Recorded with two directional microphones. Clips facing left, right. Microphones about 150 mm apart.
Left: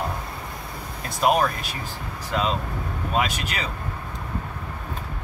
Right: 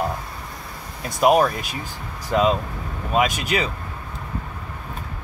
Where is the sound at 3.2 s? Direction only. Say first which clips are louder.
Right 6 dB; 15° right (ahead or behind).